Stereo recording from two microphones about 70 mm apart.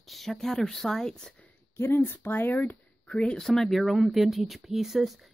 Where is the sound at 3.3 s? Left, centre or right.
Centre.